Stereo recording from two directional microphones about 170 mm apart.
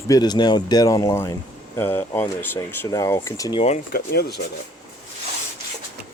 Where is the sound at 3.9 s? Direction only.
60° left (ahead or behind).